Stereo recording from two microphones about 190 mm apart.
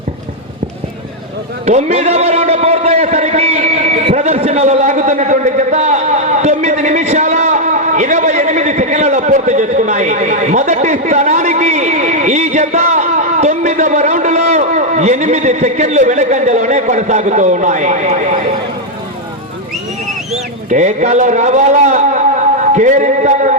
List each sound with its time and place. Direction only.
1.6 s a man's voice: 35° right (ahead or behind)
20.7 s a man's voice: 40° right (ahead or behind)